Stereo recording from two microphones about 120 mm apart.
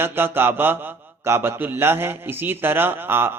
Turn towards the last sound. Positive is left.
turn(degrees=-20)  # may be behind; listen again after turning